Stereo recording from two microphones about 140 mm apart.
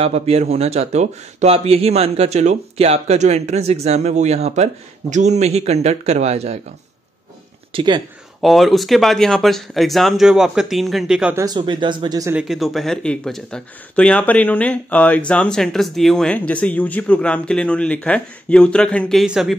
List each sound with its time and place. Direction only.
0.0 s speech: 45° right (ahead or behind)
7.7 s speech: 35° right (ahead or behind)
8.4 s speech: centre (ahead or behind)
11.3 s speech: 30° right (ahead or behind)
12.3 s speech: 5° right (ahead or behind)